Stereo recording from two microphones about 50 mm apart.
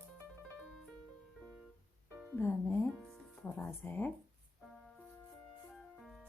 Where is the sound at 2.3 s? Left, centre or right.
Left.